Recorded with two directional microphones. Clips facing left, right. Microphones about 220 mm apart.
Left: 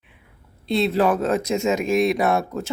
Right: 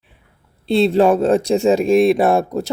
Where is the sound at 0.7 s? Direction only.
30° right (ahead or behind).